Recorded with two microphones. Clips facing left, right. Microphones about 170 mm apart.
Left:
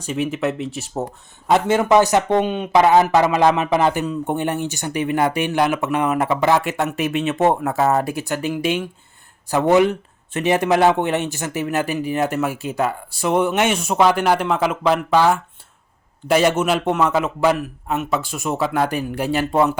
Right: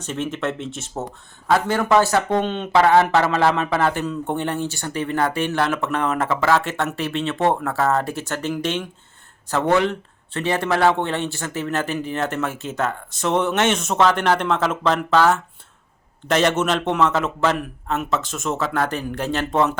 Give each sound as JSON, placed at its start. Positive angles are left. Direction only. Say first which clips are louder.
{"t": 0.0, "sound": "speech", "louder": "left 3 dB", "side_deg": 5}
{"t": 0.9, "sound": "speech", "louder": "left 5 dB", "side_deg": 20}